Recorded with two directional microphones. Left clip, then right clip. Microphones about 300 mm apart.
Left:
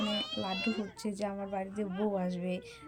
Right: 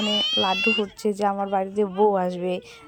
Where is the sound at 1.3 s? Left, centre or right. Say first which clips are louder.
Right 14 dB; right.